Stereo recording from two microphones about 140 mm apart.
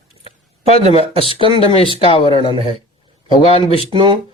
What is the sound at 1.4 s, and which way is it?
Speech, 40° right (ahead or behind).